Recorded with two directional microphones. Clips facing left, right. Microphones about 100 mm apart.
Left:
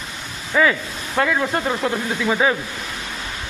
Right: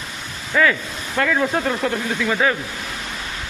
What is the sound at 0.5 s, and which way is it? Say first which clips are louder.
Speech: even; 15° left (ahead or behind).